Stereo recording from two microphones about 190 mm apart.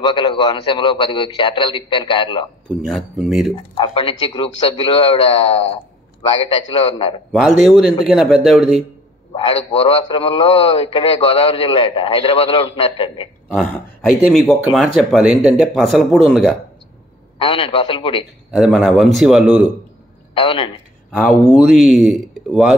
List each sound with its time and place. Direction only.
0.0 s a man's voice: 25° left (ahead or behind)
3.3 s speech: centre (ahead or behind)
3.7 s a man's voice: 30° left (ahead or behind)
7.3 s speech: centre (ahead or behind)
9.3 s a man's voice: 30° left (ahead or behind)
14.5 s speech: centre (ahead or behind)
17.4 s a man's voice: 30° left (ahead or behind)
18.5 s speech: centre (ahead or behind)
20.3 s a man's voice: 25° left (ahead or behind)
21.1 s speech: centre (ahead or behind)